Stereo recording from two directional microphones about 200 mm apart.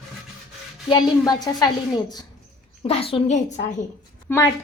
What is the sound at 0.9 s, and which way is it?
Speech, 20° left (ahead or behind).